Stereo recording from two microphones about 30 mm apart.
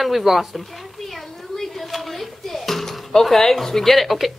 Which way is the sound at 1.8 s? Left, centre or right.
Centre.